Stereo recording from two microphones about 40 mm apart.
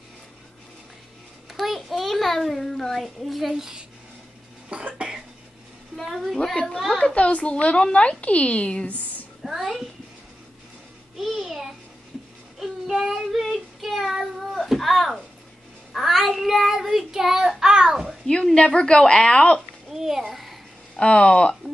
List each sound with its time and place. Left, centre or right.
1.5 s a sound: centre
3.0 s a woman's voice: centre
3.5 s speech: centre
4.6 s cough: right
5.9 s a woman's voice: centre
7.2 s a woman's voice: left
9.4 s a sound: centre
11.1 s a sound: centre
12.8 s child singing: centre
14.7 s speech: centre
15.9 s child singing: centre
18.2 s a woman's voice: left
19.9 s a sound: centre
20.9 s a woman's voice: left